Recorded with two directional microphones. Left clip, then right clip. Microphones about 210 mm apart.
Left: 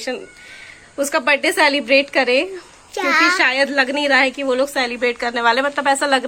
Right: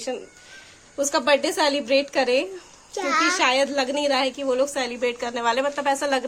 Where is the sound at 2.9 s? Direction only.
10° right (ahead or behind).